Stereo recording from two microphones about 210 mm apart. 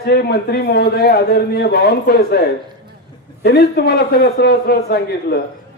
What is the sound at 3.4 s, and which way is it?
A man's voice, 50° left (ahead or behind).